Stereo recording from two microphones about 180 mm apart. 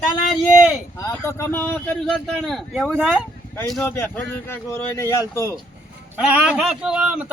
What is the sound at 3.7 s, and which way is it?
Speech, 10° left (ahead or behind).